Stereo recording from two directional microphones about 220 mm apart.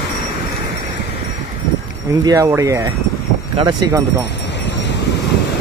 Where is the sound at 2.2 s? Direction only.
15° right (ahead or behind).